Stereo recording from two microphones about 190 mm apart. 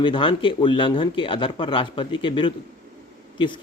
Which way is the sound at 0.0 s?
25° left (ahead or behind).